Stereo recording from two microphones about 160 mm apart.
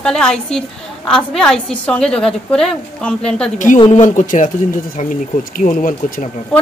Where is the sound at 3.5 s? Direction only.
50° left (ahead or behind).